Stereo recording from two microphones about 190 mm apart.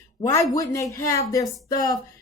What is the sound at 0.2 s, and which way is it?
Speech, 20° left (ahead or behind).